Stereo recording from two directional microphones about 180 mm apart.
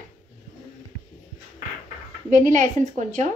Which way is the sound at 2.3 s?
45° right (ahead or behind).